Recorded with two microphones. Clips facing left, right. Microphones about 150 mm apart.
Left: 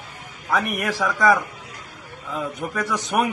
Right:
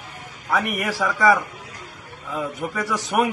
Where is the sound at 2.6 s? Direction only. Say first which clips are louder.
Even; centre (ahead or behind).